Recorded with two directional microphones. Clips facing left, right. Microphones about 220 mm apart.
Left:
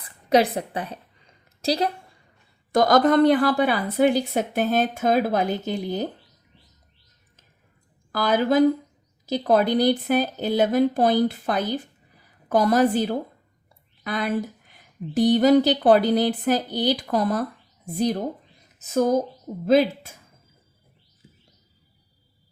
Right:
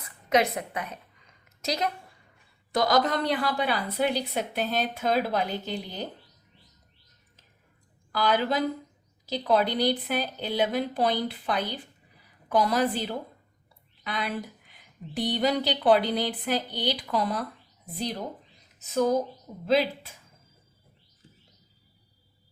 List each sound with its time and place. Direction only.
0.0 s a sound: 35° left (ahead or behind)
2.7 s speech: 50° left (ahead or behind)
8.1 s speech: 45° left (ahead or behind)